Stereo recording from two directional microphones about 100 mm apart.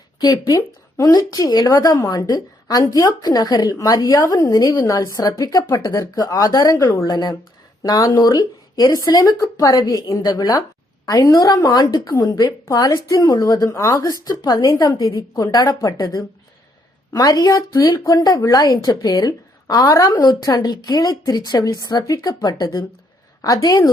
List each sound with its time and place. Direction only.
0.2 s a woman's voice: 40° left (ahead or behind)
17.1 s a woman's voice: 40° left (ahead or behind)